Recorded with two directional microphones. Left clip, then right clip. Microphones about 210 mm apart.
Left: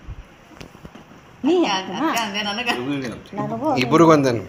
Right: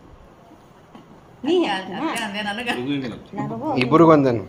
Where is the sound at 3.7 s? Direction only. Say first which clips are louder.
Right 1 dB; centre (ahead or behind).